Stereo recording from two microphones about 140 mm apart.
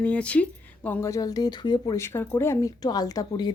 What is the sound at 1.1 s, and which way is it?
Speech, 25° left (ahead or behind).